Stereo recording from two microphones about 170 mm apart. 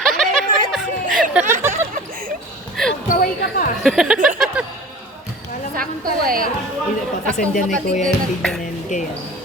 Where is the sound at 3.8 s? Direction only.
5° right (ahead or behind).